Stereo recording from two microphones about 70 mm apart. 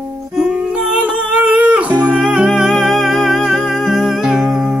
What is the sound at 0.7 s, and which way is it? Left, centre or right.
Music, centre.